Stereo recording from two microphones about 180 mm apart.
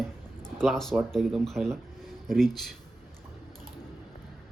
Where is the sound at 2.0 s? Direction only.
Centre (ahead or behind).